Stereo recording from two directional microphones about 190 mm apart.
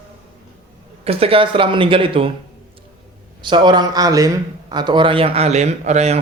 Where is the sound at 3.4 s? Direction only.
25° right (ahead or behind).